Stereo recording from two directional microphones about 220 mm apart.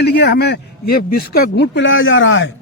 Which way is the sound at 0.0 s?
50° left (ahead or behind).